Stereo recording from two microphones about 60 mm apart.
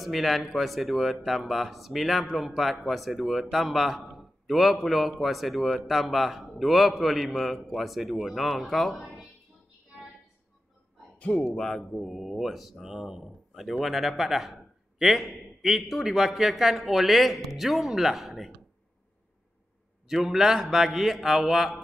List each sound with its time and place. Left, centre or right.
0.0 s speech: centre
11.1 s speech: centre
12.1 s speech: centre
20.1 s speech: centre